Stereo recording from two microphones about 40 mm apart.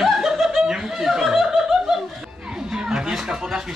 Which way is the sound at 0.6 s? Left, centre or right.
Centre.